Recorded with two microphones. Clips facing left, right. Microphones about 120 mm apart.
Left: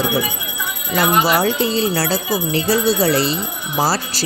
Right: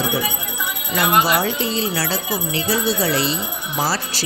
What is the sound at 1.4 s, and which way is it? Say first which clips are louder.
Speech: left 4 dB; 40° left (ahead or behind).